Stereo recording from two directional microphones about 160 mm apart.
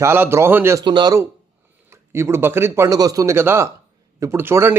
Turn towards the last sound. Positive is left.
turn(degrees=-15)  # may be behind; listen again after turning